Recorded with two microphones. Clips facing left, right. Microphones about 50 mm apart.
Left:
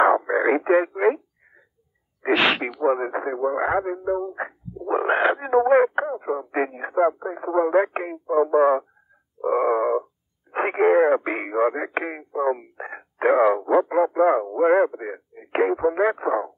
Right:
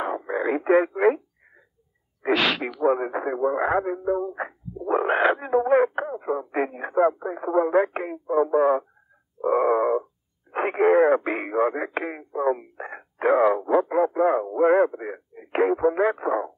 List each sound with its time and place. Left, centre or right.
0.0 s radio: left
0.3 s radio: left
0.7 s speech: centre
2.2 s speech: left
2.8 s speech: centre
5.4 s speech: left
9.4 s speech: centre
10.5 s speech: left
10.9 s speech: centre